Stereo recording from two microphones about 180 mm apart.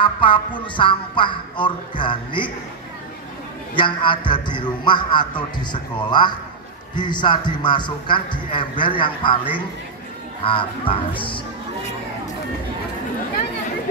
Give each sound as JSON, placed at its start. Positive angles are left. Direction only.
{"t": 0.0, "sound": "speech", "side_deg": 25}
{"t": 3.7, "sound": "speech", "side_deg": 25}
{"t": 10.4, "sound": "speech", "side_deg": 30}